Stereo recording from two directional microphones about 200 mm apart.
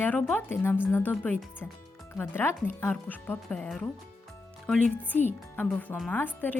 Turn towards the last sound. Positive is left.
turn(degrees=10)  # may be behind; listen again after turning